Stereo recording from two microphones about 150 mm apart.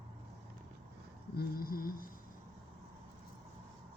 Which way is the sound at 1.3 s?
75° left (ahead or behind).